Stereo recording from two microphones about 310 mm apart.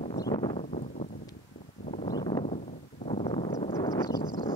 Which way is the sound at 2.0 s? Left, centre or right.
Centre.